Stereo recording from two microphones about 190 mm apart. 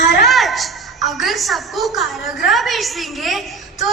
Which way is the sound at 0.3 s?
Centre (ahead or behind).